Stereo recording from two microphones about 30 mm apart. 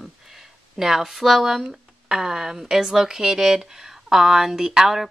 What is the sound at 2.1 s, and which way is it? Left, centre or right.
Speech, centre.